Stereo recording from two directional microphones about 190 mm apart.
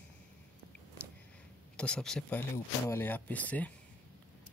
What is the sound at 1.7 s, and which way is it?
Speech, 5° left (ahead or behind).